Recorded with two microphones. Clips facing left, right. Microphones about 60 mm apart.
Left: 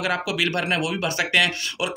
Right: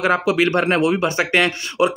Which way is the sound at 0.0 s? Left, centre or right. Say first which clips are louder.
Right 7 dB; right.